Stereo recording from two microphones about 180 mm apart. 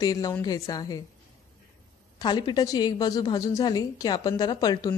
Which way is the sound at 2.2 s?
25° left (ahead or behind).